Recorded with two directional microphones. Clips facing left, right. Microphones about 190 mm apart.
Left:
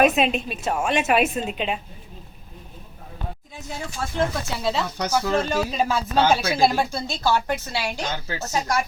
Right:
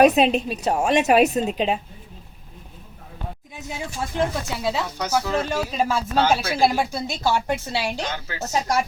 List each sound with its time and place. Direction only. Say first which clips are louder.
0.0 s a woman's voice: right 3 dB; 35° right (ahead or behind)
3.8 s speech: right 1 dB; 10° right (ahead or behind)
7.2 s a woman's voice: even; 25° right (ahead or behind)